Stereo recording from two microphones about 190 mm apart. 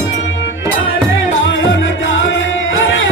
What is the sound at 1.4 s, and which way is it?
Music, 85° left.